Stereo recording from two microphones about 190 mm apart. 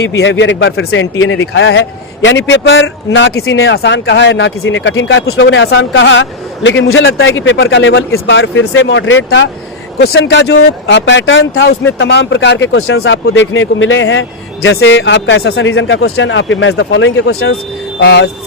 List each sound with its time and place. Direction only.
0.2 s speech: 70° left (ahead or behind)
10.0 s speech: 65° left (ahead or behind); by 17.5 s 90° left
18.0 s speech: 60° left (ahead or behind)